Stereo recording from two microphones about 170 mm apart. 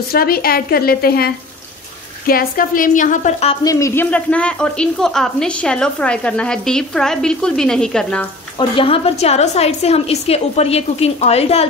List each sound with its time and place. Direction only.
0.1 s a woman's voice: 60° left (ahead or behind); by 3.5 s 40° left (ahead or behind)
3.6 s a woman's voice: 15° left (ahead or behind)
8.5 s a woman's voice: 30° left (ahead or behind)